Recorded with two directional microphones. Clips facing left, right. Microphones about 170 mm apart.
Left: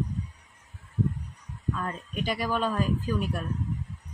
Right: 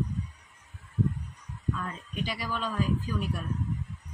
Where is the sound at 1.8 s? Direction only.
50° left (ahead or behind).